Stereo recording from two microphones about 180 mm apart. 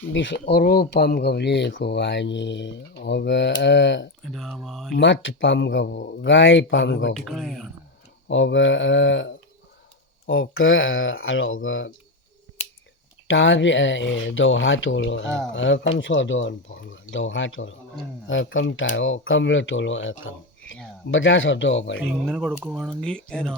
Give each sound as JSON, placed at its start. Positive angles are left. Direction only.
{"t": 0.1, "sound": "speech", "side_deg": 85}
{"t": 4.2, "sound": "speech", "side_deg": 0}
{"t": 4.9, "sound": "speech", "side_deg": 90}
{"t": 6.2, "sound": "speech", "side_deg": 90}
{"t": 7.1, "sound": "speech", "side_deg": 0}
{"t": 8.3, "sound": "speech", "side_deg": 90}
{"t": 13.2, "sound": "speech", "side_deg": 90}
{"t": 22.3, "sound": "speech", "side_deg": 0}